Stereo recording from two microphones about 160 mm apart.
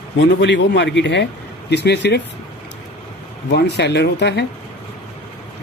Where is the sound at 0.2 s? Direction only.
90° left.